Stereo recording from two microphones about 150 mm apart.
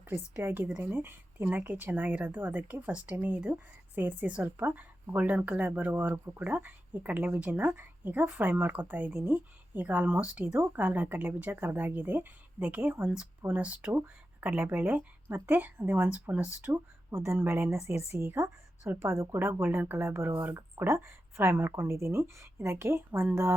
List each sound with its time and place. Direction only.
0.3 s speech: 15° right (ahead or behind)